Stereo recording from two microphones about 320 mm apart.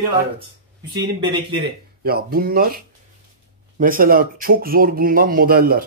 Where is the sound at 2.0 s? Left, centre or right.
Right.